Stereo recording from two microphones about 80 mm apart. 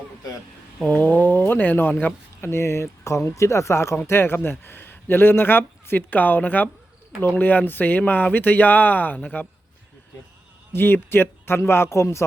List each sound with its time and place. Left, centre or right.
0.9 s speech: left
2.5 s speech: left
10.7 s speech: left